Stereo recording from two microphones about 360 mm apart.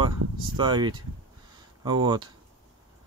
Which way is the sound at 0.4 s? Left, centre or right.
Centre.